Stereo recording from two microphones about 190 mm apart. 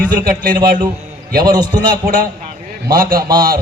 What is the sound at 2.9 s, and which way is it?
Speech, 50° right (ahead or behind).